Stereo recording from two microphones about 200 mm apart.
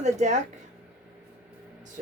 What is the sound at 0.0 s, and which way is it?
Speech, 35° right (ahead or behind).